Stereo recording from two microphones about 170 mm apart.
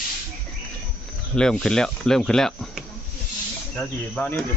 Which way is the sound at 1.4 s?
5° left (ahead or behind).